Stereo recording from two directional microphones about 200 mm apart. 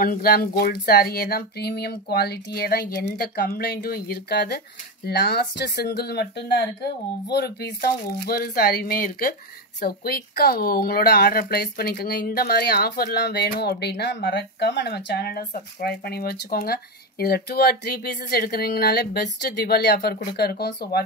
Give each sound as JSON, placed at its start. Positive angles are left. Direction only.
{"t": 0.0, "sound": "speech", "side_deg": 50}